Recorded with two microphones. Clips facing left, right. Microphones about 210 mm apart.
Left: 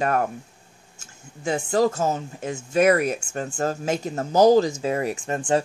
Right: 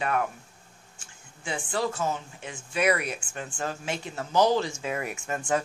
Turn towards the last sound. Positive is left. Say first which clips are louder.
# left 5 dB
turn(degrees=30)  # may be behind; listen again after turning